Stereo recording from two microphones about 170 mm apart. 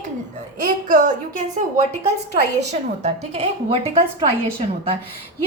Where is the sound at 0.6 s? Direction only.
50° right (ahead or behind).